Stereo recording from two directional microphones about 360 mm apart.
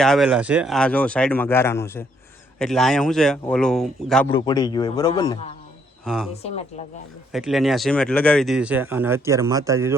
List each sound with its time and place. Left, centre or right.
0.0 s speech: centre
4.3 s speech: centre
6.1 s speech: centre
7.3 s speech: centre